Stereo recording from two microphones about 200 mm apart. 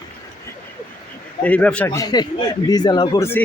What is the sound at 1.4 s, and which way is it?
A man's voice, 10° left (ahead or behind).